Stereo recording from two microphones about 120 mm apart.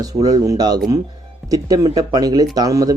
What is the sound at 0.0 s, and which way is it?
Speech, 30° right (ahead or behind).